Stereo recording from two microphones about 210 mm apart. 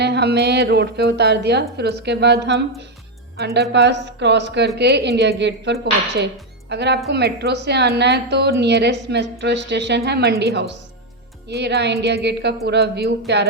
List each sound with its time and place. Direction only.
0.0 s speech: 50° right (ahead or behind)